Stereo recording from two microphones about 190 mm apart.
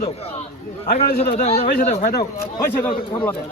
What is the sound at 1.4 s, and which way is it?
Speech, 30° left (ahead or behind).